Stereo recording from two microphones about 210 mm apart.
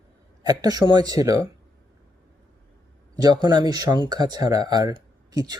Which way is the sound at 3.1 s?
20° right (ahead or behind).